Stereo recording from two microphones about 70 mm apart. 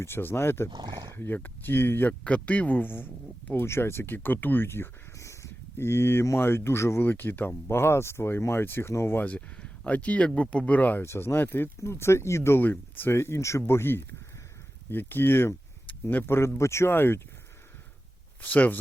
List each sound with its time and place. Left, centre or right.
0.0 s speech: left
0.7 s speech: right
1.1 s speech: left
2.2 s speech: centre; by 4.9 s left
5.1 s a sound: left
5.7 s speech: left
9.2 s speech: centre
11.0 s speech: left
11.8 s speech: left
18.4 s speech: left